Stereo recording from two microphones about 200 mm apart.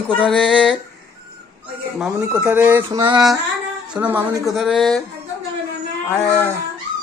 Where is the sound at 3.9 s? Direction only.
10° right (ahead or behind).